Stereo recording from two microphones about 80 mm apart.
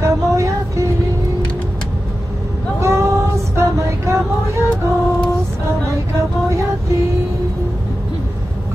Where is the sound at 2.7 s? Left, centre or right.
Right.